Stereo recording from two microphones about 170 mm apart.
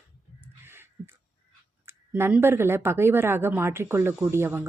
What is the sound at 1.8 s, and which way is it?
Speech, 10° right (ahead or behind).